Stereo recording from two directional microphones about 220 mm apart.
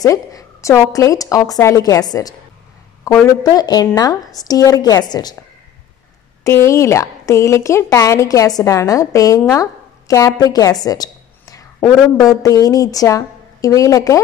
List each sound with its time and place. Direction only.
0.0 s a woman's voice: 15° left (ahead or behind)
6.4 s a woman's voice: 15° left (ahead or behind)